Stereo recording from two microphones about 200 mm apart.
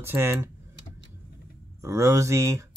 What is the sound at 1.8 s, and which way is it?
Speech, 15° right (ahead or behind).